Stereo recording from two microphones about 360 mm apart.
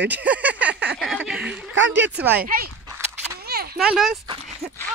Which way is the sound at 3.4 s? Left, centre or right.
Right.